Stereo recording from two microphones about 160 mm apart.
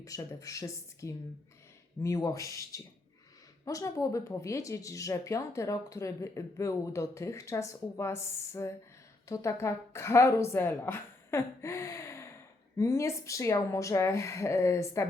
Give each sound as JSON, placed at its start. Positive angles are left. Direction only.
{"t": 0.0, "sound": "a woman's voice", "side_deg": 20}